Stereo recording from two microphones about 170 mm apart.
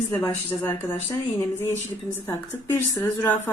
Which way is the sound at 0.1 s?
15° left (ahead or behind).